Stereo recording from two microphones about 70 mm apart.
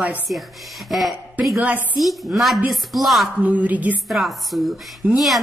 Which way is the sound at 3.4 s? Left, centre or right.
Right.